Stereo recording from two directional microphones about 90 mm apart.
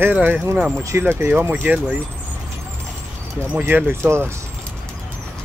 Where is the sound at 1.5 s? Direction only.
10° right (ahead or behind).